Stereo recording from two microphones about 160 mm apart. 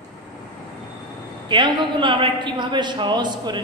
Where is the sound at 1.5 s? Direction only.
30° right (ahead or behind).